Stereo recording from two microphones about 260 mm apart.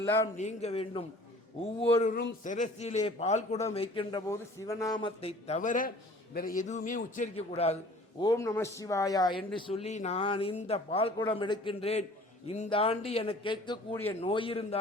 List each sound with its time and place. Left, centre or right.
0.0 s a man's voice: centre
0.3 s a man's voice: left
8.2 s a man's voice: centre
14.2 s a man's voice: centre